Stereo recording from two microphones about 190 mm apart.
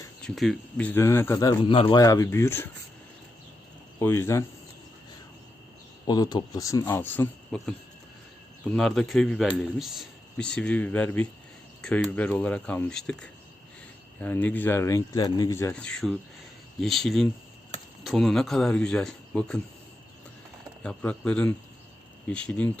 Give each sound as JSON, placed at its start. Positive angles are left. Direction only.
{"t": 0.3, "sound": "a man's voice", "side_deg": 0}
{"t": 4.0, "sound": "a man's voice", "side_deg": 15}
{"t": 6.1, "sound": "a man's voice", "side_deg": 20}
{"t": 8.7, "sound": "a man's voice", "side_deg": 0}
{"t": 20.8, "sound": "a man's voice", "side_deg": 5}